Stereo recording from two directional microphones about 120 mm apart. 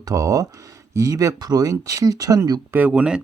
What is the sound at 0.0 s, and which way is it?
Speech, 30° right (ahead or behind).